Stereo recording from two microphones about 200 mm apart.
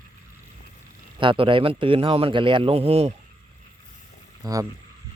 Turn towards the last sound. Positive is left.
turn(degrees=-20)  # may be behind; listen again after turning